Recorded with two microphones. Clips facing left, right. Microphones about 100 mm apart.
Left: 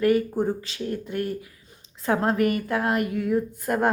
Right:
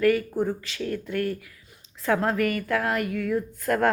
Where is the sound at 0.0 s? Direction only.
20° left (ahead or behind).